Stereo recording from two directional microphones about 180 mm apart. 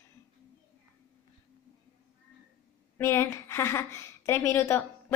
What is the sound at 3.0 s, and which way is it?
A woman's voice, 15° left (ahead or behind).